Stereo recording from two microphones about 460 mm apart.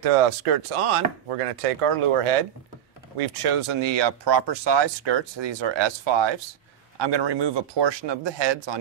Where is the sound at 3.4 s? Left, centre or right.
Right.